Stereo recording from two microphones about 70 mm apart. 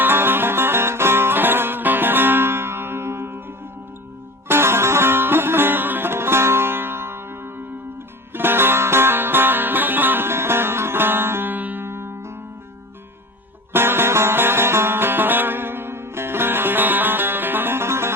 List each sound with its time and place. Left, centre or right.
0.0 s music: right
4.4 s music: right
13.7 s music: right